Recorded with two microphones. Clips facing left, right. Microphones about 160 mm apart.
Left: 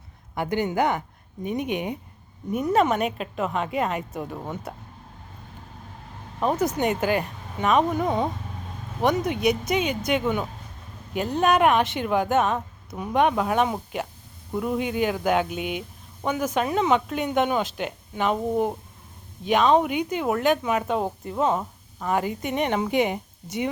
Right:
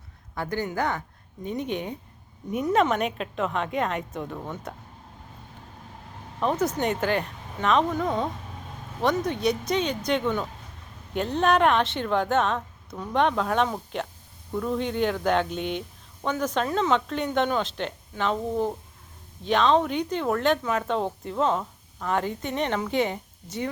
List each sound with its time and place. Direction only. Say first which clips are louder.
0.3 s a woman's voice: left 4 dB; 20° left (ahead or behind)
6.4 s speech: left 2 dB; 10° left (ahead or behind)